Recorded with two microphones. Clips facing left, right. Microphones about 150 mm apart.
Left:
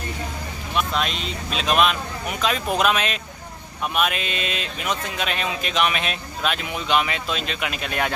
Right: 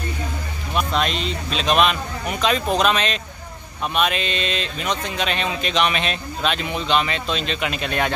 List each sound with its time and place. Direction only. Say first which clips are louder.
0.7 s speech: right 3 dB; centre (ahead or behind)